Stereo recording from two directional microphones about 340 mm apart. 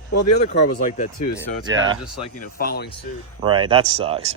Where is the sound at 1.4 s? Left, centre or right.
Centre.